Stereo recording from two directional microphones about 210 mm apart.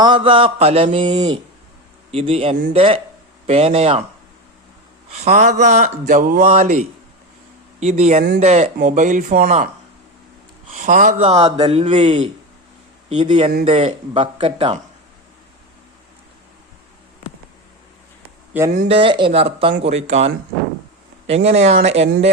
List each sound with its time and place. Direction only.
0.0 s mantra: 25° right (ahead or behind)
5.1 s speech: 35° right (ahead or behind)
10.7 s speech: 35° right (ahead or behind)
13.7 s mantra: 30° right (ahead or behind)
18.7 s mantra: 30° right (ahead or behind)
19.8 s speech: 30° right (ahead or behind)